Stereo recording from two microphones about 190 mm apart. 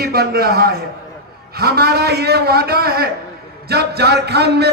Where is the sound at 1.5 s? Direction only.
55° right (ahead or behind).